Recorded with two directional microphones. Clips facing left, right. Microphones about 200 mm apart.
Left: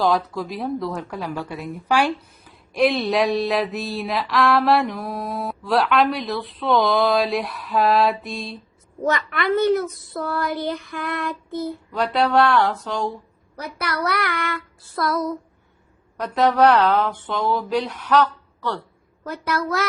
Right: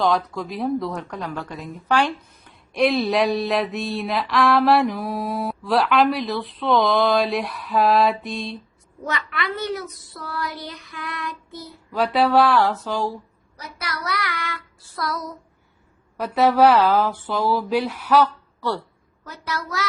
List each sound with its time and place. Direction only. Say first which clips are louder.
0.0 s speech: left 1 dB; centre (ahead or behind)
9.0 s a child's voice: left 6 dB; 45° left (ahead or behind)
11.9 s speech: right 3 dB; 5° right (ahead or behind)
13.6 s child singing: left 6 dB; 60° left (ahead or behind)
16.1 s speech: right 1 dB; 5° right (ahead or behind)
19.2 s child singing: left 6 dB; 55° left (ahead or behind)